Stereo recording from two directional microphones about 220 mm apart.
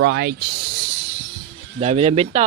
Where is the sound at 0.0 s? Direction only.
50° right (ahead or behind).